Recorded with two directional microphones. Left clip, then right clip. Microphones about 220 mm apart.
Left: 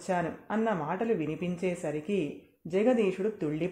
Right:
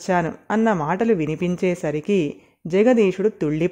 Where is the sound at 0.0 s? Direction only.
45° right (ahead or behind).